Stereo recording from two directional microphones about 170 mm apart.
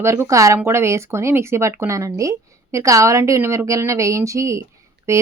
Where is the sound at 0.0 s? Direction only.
15° right (ahead or behind).